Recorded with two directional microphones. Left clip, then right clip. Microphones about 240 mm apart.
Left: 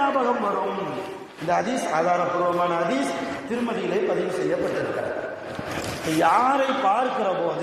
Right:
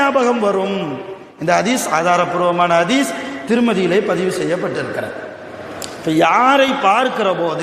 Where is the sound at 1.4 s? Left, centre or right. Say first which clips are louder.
Right 8 dB; right.